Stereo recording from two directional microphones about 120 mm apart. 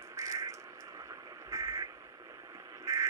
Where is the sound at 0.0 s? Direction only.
25° right (ahead or behind).